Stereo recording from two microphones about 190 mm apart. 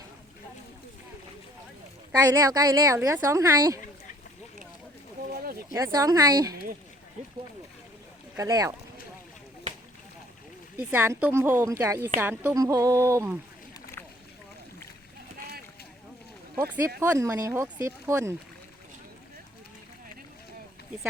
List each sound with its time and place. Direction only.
2.1 s a woman's voice: 20° right (ahead or behind)
5.3 s a sound: 50° right (ahead or behind)
5.7 s a woman's voice: 15° right (ahead or behind)
8.4 s a woman's voice: 15° right (ahead or behind)
10.8 s a woman's voice: 10° right (ahead or behind)
17.0 s a woman's voice: 15° right (ahead or behind)